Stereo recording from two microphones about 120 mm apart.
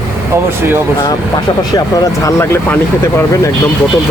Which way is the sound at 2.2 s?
25° left (ahead or behind).